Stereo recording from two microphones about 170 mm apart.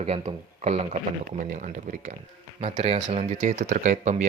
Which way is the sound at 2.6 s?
35° right (ahead or behind).